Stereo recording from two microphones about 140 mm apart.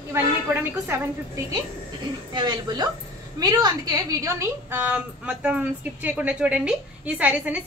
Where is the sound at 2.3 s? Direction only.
30° right (ahead or behind).